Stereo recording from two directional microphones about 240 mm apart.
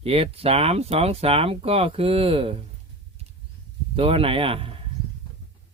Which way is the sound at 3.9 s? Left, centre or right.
Right.